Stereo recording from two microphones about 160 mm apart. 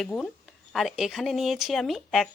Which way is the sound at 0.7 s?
Centre (ahead or behind).